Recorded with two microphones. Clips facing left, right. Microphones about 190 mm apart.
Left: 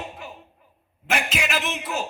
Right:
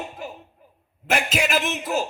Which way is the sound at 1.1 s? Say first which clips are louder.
Right 3 dB; 45° right (ahead or behind).